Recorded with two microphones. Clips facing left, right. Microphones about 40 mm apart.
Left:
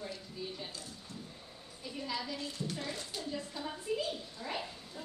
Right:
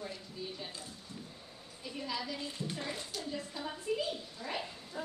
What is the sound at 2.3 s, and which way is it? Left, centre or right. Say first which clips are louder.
Speech: even; right.